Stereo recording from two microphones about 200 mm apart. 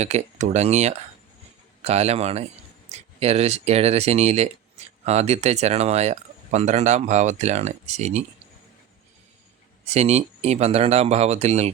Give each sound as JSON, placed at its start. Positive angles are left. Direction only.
{"t": 0.0, "sound": "speech", "side_deg": -35}
{"t": 9.8, "sound": "speech", "side_deg": -30}